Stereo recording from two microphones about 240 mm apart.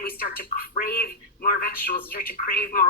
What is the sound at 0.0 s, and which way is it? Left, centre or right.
Speech, left.